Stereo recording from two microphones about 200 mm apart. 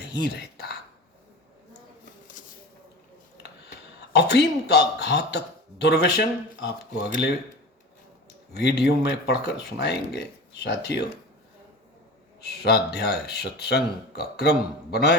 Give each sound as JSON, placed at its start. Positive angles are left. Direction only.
{"t": 2.4, "sound": "a sound", "side_deg": 40}
{"t": 4.1, "sound": "speech", "side_deg": 60}
{"t": 8.5, "sound": "speech", "side_deg": 55}
{"t": 12.4, "sound": "speech", "side_deg": 55}